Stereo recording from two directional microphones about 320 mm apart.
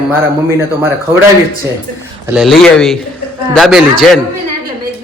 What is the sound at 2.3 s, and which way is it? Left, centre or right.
A man's voice, centre.